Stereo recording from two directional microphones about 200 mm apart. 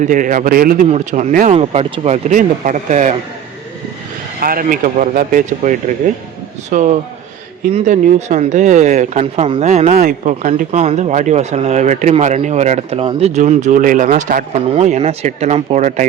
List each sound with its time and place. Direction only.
0.0 s speech: 40° right (ahead or behind)
4.4 s speech: 45° right (ahead or behind)